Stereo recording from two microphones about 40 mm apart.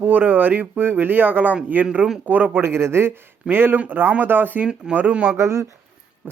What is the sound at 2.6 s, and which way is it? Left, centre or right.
Speech, right.